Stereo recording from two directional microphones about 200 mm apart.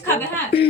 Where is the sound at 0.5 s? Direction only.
30° left (ahead or behind).